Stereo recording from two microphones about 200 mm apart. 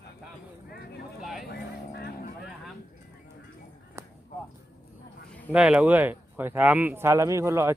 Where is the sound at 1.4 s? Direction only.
55° left (ahead or behind).